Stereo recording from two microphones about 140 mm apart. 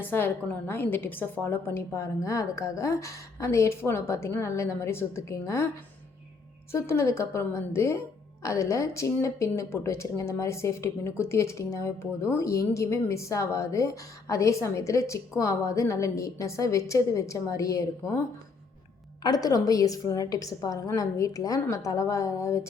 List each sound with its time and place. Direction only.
0.0 s a woman's voice: 15° left (ahead or behind)
6.7 s a woman's voice: 20° left (ahead or behind)
19.2 s a woman's voice: 25° left (ahead or behind)